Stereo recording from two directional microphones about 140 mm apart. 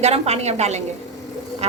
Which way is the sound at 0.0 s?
50° right (ahead or behind).